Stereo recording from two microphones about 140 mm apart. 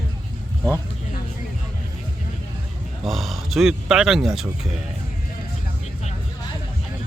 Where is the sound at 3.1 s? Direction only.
Centre (ahead or behind).